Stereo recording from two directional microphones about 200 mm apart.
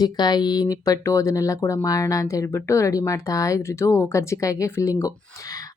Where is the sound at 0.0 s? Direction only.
20° left (ahead or behind).